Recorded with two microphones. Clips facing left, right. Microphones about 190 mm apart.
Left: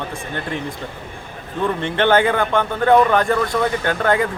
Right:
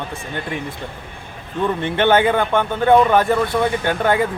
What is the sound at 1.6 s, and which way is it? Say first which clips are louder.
A man's voice: right 1 dB; 15° right (ahead or behind).